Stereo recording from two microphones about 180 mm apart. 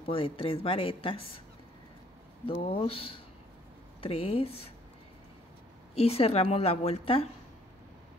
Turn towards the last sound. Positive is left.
turn(degrees=30)  # may be behind; listen again after turning